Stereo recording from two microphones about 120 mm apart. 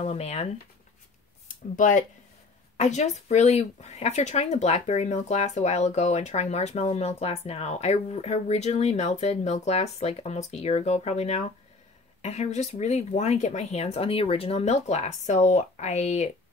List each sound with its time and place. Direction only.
0.0 s speech: 65° left (ahead or behind)
1.5 s speech: 90° left
2.8 s speech: 75° left (ahead or behind)